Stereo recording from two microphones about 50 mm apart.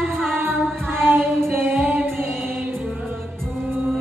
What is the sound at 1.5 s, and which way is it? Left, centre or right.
A capella, right.